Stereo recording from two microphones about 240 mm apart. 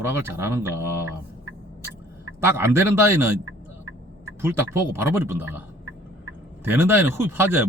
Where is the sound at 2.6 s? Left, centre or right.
Centre.